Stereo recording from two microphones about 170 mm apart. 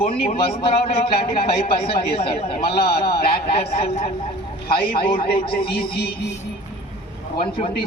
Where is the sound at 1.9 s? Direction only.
35° left (ahead or behind).